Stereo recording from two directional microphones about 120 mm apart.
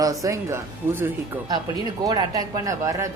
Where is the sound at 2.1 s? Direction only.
30° right (ahead or behind).